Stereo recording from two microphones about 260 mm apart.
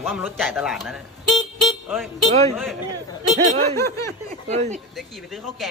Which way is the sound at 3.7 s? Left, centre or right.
Centre.